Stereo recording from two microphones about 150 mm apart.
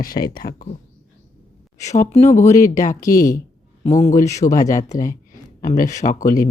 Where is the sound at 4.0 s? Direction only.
55° left (ahead or behind).